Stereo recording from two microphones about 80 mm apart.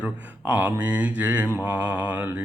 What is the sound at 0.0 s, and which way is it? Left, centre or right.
Mantra, centre.